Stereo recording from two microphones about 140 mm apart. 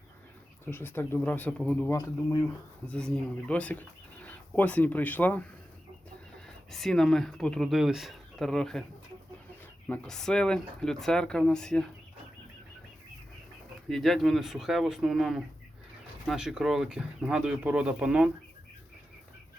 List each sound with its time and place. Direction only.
0.6 s speech: 15° left (ahead or behind)
1.9 s speech: 25° left (ahead or behind)
2.8 s speech: 10° left (ahead or behind)
6.7 s speech: centre (ahead or behind)
9.9 s speech: 5° left (ahead or behind)
13.9 s speech: centre (ahead or behind)